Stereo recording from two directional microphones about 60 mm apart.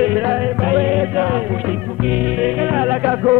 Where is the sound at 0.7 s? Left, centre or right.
Centre.